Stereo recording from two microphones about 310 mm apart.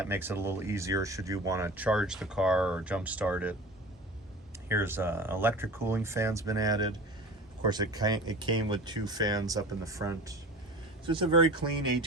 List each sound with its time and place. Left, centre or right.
0.0 s speech: centre
4.7 s speech: centre